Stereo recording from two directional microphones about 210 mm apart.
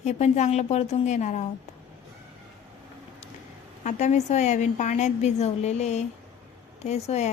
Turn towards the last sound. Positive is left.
turn(degrees=30)  # may be behind; listen again after turning